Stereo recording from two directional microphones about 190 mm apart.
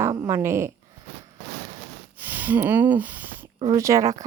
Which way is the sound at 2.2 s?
10° right (ahead or behind).